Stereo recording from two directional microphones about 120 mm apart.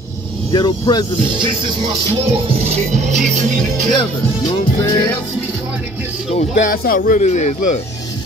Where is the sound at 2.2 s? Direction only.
50° right (ahead or behind); by 3.7 s 90° right.